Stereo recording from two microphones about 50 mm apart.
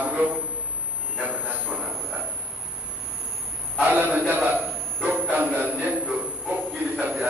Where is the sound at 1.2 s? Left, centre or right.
Right.